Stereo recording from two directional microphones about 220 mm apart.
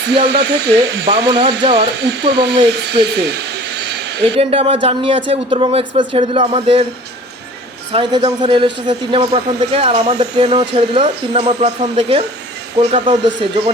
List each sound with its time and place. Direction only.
0.0 s speech: 50° right (ahead or behind)
4.4 s speech: 25° right (ahead or behind)
7.9 s speech: 20° right (ahead or behind)